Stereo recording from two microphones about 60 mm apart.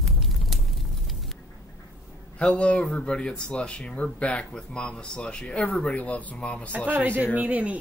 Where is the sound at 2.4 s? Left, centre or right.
Centre.